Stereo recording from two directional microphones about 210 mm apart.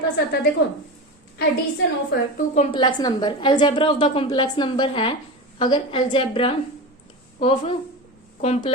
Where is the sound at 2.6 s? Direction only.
20° left (ahead or behind).